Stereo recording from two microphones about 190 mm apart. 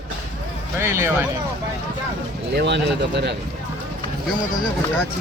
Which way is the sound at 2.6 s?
65° right (ahead or behind).